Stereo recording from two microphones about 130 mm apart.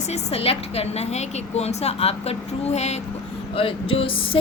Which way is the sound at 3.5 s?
45° left (ahead or behind).